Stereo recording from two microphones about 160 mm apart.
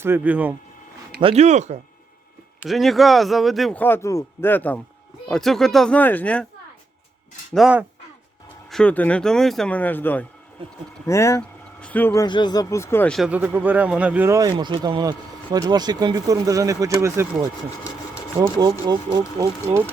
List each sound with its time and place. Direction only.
0.0 s speech: 10° right (ahead or behind)
1.2 s speech: 40° right (ahead or behind)
2.6 s a man's voice: centre (ahead or behind)
7.5 s a man's voice: 5° right (ahead or behind)
8.7 s speech: 10° left (ahead or behind)
12.2 s speech: 25° left (ahead or behind)
13.1 s speech: 5° right (ahead or behind)
18.3 s speech: 30° right (ahead or behind)